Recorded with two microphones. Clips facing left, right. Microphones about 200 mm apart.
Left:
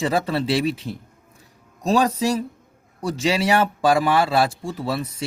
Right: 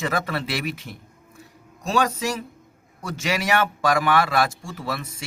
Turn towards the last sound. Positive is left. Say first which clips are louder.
# left 5 dB
turn(degrees=30)  # may be behind; listen again after turning